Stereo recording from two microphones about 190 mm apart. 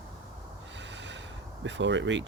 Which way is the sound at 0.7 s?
70° right (ahead or behind).